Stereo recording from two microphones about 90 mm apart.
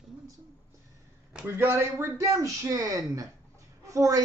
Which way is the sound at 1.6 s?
25° right (ahead or behind).